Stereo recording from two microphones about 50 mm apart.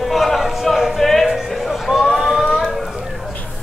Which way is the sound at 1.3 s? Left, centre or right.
Centre.